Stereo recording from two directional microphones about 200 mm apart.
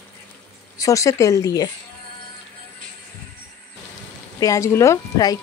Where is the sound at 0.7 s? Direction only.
15° left (ahead or behind).